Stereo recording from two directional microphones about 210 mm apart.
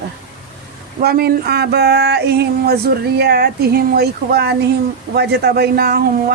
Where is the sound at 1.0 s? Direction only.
50° right (ahead or behind).